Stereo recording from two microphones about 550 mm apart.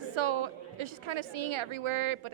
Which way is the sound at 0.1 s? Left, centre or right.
Right.